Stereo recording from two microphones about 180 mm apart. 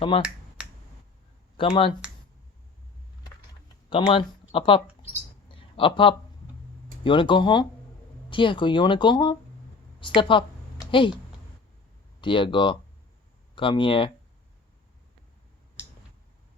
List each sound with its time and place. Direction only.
0.2 s finger snapping: 5° right (ahead or behind)
1.5 s speech: 30° left (ahead or behind)
3.8 s speech: 30° left (ahead or behind)
5.5 s a sound: 30° left (ahead or behind)
7.0 s speech: 25° left (ahead or behind)
12.2 s speech: 25° left (ahead or behind)